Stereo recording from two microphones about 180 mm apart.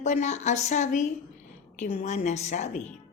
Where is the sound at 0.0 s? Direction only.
40° left (ahead or behind).